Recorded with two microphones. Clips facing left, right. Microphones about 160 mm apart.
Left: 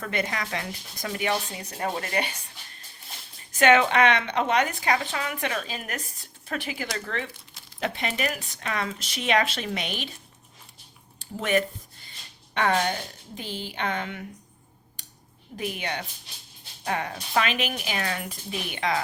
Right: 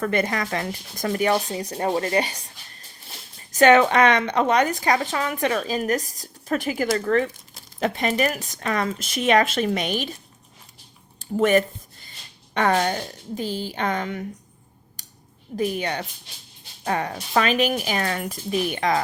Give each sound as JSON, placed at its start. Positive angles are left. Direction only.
{"t": 0.0, "sound": "a woman's voice", "side_deg": -45}
{"t": 3.5, "sound": "a woman's voice", "side_deg": -40}
{"t": 11.3, "sound": "a woman's voice", "side_deg": -45}
{"t": 15.0, "sound": "a sound", "side_deg": -40}
{"t": 15.5, "sound": "a woman's voice", "side_deg": -40}